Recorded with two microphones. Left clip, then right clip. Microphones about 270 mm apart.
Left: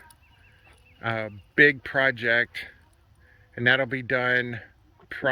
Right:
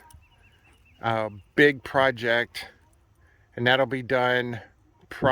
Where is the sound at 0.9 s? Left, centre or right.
Centre.